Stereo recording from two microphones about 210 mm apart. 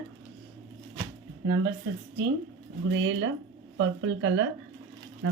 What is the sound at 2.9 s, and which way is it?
Speech, 65° right (ahead or behind).